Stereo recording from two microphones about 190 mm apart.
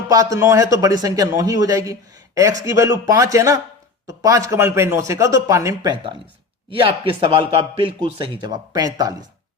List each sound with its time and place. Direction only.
0.1 s a man's voice: 15° right (ahead or behind)